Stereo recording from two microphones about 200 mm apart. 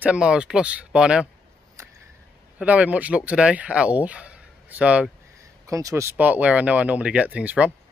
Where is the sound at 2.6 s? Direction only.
5° right (ahead or behind).